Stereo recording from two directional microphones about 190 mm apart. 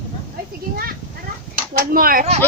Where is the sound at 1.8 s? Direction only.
50° right (ahead or behind).